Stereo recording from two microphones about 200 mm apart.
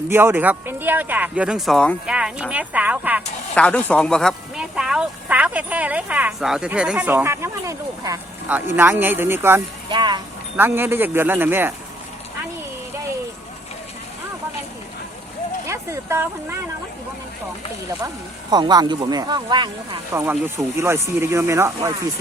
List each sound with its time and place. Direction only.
0.1 s speech: 10° right (ahead or behind)
3.5 s speech: 5° left (ahead or behind); by 10.2 s 20° right (ahead or behind)
10.6 s speech: 10° right (ahead or behind)
15.6 s speech: 15° right (ahead or behind)
18.5 s speech: 20° right (ahead or behind)
20.2 s speech: 10° right (ahead or behind)